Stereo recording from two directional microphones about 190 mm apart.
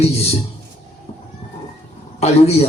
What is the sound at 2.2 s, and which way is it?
Speech, 35° left (ahead or behind).